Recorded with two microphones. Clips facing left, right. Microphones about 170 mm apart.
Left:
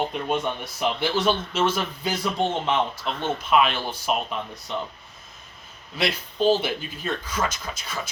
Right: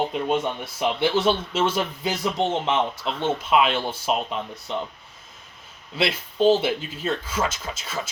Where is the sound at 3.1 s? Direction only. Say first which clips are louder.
Right 3 dB; 5° right (ahead or behind).